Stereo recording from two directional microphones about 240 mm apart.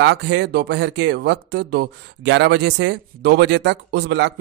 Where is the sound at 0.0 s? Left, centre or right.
Right.